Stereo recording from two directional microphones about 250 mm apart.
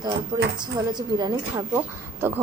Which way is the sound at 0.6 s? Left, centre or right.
Centre.